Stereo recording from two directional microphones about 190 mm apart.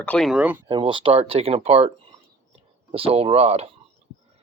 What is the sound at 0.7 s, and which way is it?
Speech, 25° right (ahead or behind).